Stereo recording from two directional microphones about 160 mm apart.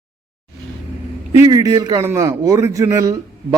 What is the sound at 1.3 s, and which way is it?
A man's voice, 25° right (ahead or behind).